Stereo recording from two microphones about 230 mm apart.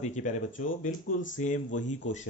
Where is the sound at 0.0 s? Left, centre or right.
Left.